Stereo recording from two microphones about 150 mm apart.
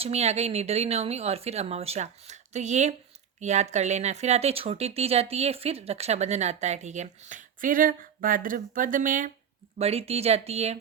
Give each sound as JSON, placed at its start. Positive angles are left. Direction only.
{"t": 0.0, "sound": "speech", "side_deg": -45}
{"t": 9.7, "sound": "speech", "side_deg": -45}